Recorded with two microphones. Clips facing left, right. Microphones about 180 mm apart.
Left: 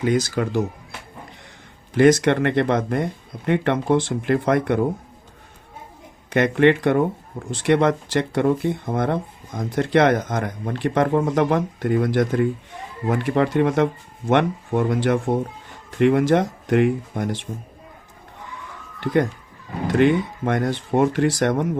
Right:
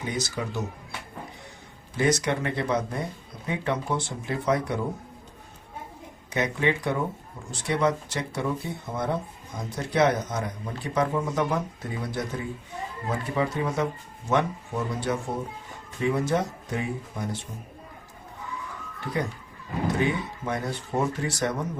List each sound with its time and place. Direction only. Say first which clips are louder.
0.0 s speech: left 10 dB; 90° left
1.9 s speech: left 9 dB; 90° left
6.3 s speech: left 9 dB; 85° left
7.5 s speech: left 7 dB; 90° left
18.9 s speech: left 10 dB; 90° left